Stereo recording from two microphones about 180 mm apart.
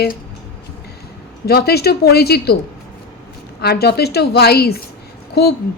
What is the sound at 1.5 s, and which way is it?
A woman's voice, 60° left (ahead or behind).